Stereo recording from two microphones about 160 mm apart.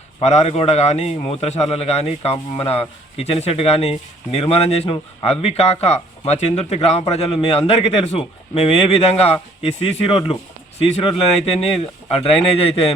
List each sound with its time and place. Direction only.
0.2 s a man's voice: 45° left (ahead or behind)